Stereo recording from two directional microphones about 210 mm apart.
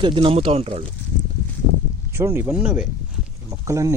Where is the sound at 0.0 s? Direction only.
25° right (ahead or behind).